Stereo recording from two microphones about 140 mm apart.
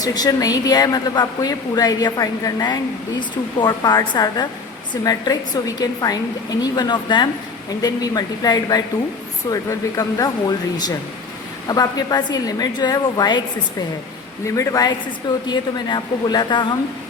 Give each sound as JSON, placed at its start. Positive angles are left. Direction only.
{"t": 0.0, "sound": "a woman's voice", "side_deg": 25}
{"t": 11.7, "sound": "a woman's voice", "side_deg": 30}
{"t": 14.4, "sound": "a woman's voice", "side_deg": 20}